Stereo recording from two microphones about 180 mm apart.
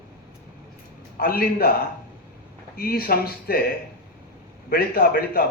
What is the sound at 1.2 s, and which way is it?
Speech, 55° left (ahead or behind).